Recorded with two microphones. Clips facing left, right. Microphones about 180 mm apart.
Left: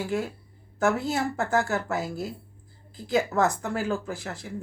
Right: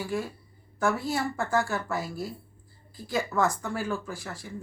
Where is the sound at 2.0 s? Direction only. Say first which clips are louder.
Left 2 dB; 20° left (ahead or behind).